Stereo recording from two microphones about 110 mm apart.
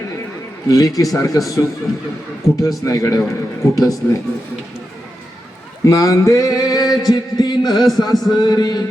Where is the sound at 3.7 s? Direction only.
35° left (ahead or behind).